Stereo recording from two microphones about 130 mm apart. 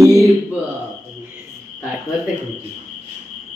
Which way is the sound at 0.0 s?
25° right (ahead or behind).